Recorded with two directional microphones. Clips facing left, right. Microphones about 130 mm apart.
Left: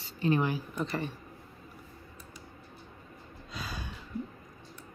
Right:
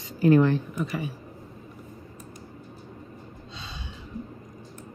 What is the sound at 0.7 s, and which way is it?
Speech, 10° right (ahead or behind).